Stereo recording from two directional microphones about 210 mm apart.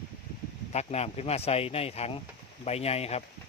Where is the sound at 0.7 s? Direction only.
30° left (ahead or behind).